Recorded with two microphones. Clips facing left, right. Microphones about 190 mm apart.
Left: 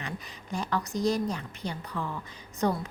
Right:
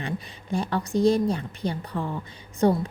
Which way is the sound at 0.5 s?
30° right (ahead or behind).